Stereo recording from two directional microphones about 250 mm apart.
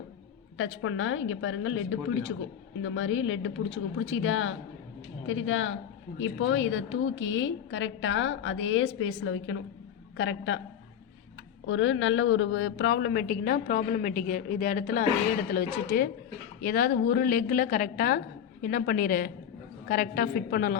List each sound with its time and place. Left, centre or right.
0.5 s a woman's voice: left
11.6 s a woman's voice: left